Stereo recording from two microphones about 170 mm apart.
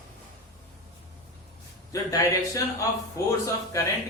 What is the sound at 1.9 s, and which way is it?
Speech, 20° left (ahead or behind).